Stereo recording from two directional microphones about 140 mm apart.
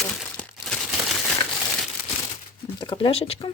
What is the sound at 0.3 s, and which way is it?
Crumpling, 5° left (ahead or behind).